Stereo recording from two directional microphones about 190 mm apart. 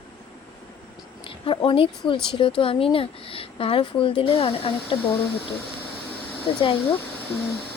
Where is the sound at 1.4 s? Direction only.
25° left (ahead or behind).